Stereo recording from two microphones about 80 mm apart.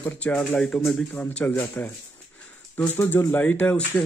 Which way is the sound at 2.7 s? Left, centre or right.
Left.